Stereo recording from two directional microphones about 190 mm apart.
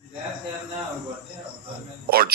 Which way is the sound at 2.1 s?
55° right (ahead or behind).